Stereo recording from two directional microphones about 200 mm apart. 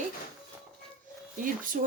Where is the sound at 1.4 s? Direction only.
45° right (ahead or behind).